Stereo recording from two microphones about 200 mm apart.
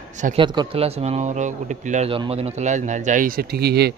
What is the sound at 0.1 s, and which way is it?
Speech, 35° right (ahead or behind).